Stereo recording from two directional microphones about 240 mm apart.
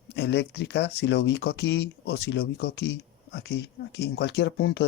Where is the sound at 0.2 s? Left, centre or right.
Left.